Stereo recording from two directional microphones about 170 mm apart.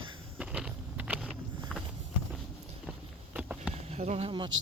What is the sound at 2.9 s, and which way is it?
Walk, 10° right (ahead or behind).